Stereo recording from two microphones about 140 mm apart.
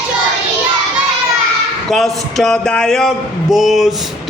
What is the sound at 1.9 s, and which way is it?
Speech, centre (ahead or behind).